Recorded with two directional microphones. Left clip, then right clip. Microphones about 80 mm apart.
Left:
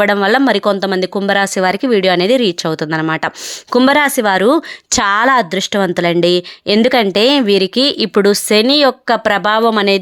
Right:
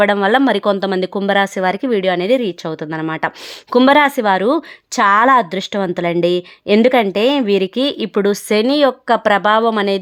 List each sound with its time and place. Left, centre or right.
0.0 s speech: centre
2.0 s speech: left
3.8 s speech: centre
4.9 s a woman's voice: left
5.2 s speech: centre